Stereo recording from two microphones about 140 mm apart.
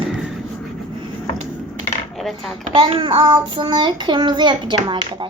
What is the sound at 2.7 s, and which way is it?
Child singing, 35° right (ahead or behind).